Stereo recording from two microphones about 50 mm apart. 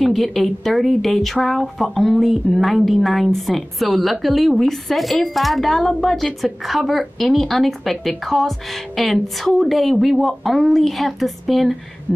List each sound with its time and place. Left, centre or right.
0.0 s speech: centre